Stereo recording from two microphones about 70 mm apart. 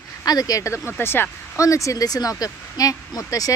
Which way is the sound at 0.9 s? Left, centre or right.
Left.